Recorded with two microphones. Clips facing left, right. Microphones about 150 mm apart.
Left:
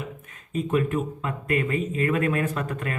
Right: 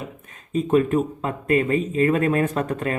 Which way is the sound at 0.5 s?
30° right (ahead or behind).